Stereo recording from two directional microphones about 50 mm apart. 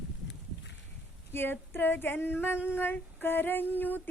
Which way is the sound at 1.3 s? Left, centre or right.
Left.